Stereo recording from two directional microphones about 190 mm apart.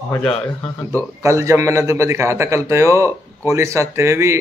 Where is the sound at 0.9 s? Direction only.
15° right (ahead or behind).